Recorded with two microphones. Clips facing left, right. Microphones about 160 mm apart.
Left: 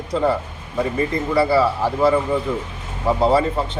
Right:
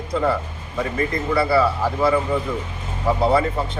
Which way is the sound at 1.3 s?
25° left (ahead or behind).